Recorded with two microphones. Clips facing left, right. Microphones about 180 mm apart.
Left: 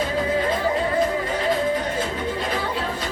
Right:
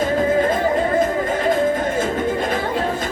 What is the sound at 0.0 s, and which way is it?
Music, 50° right (ahead or behind).